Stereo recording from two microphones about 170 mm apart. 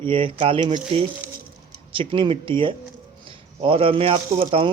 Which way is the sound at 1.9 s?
30° right (ahead or behind).